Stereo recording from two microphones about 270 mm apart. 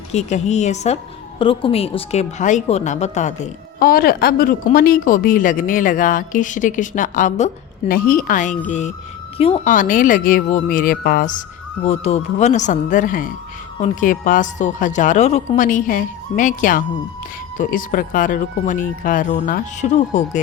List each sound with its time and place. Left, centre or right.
0.1 s a woman's voice: left